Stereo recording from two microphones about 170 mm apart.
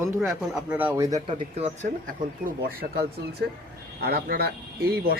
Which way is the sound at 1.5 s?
35° right (ahead or behind).